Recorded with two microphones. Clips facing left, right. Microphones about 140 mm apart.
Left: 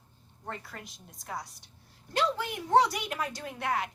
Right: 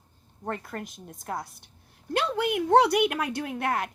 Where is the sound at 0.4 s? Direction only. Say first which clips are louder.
Right 8 dB; 50° right (ahead or behind).